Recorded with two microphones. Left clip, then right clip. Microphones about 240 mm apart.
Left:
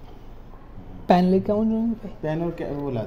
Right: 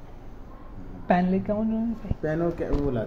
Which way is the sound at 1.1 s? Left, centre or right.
Left.